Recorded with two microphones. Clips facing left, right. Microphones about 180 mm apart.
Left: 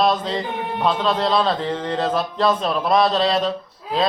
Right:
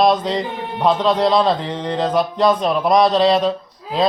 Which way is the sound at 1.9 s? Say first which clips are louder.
Right 6 dB; 15° right (ahead or behind).